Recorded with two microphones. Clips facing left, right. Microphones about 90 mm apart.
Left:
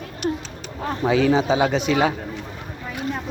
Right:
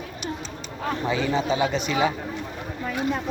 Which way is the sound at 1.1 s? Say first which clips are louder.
Left 7 dB; 90° left.